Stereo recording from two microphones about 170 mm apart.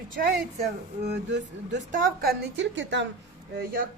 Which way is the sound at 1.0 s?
90° right.